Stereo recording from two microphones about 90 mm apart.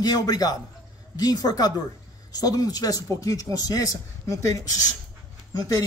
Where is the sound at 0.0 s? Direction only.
45° left (ahead or behind).